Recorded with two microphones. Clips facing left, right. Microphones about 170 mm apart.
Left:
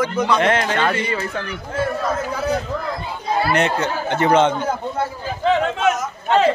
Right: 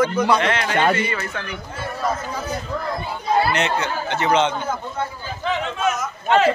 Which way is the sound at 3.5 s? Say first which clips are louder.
Left 3 dB; 50° left (ahead or behind).